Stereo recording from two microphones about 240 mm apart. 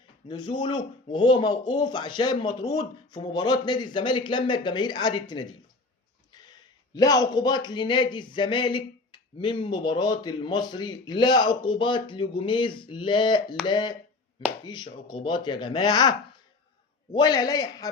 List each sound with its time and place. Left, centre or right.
0.3 s speech: centre
6.3 s a sound: centre
6.9 s a man's voice: centre